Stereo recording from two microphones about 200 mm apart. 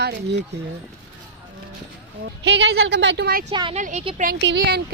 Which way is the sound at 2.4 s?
60° right (ahead or behind).